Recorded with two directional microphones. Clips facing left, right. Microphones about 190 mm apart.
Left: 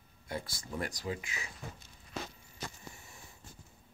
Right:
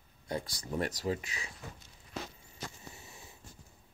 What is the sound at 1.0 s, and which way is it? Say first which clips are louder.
Speech: right 4 dB; 35° right (ahead or behind).